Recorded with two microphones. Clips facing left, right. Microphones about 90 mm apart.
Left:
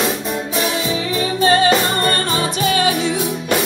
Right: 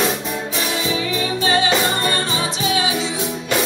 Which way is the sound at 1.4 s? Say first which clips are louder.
Left 5 dB; 40° left (ahead or behind).